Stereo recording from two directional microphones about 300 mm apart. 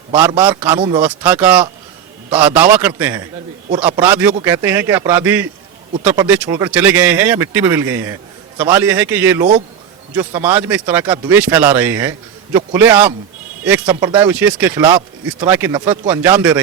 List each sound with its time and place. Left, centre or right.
0.1 s speech: centre
1.0 s a man's voice: centre